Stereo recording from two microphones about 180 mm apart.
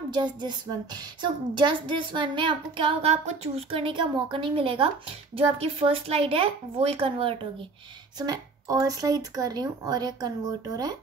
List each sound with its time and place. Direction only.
0.1 s a woman's voice: 25° right (ahead or behind)
8.2 s a woman's voice: 20° right (ahead or behind)